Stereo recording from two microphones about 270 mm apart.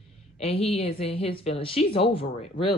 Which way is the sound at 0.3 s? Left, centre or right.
Left.